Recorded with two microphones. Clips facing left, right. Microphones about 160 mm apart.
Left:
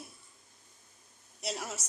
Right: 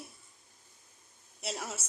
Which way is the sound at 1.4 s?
Centre (ahead or behind).